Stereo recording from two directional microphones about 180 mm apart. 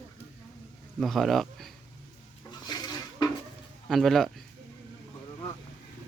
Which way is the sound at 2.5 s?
25° left (ahead or behind).